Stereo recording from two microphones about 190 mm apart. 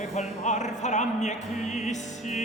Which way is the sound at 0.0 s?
35° left (ahead or behind).